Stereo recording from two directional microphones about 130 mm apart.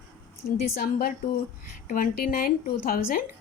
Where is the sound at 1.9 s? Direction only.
90° left.